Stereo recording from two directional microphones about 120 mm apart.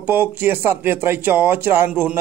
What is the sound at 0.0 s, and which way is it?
Speech, 15° right (ahead or behind).